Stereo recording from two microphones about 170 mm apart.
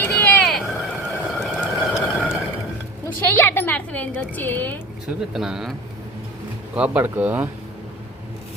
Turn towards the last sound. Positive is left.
turn(degrees=-10)  # may be behind; listen again after turning